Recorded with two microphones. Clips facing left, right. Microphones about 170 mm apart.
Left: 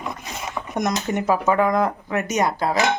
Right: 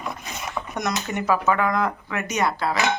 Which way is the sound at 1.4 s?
30° left (ahead or behind).